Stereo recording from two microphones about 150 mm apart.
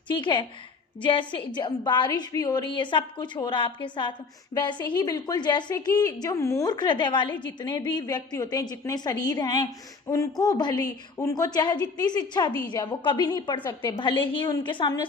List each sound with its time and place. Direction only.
0.2 s a woman's voice: 30° left (ahead or behind)